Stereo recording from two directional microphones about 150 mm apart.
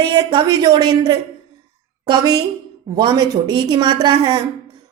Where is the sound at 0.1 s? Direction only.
30° right (ahead or behind).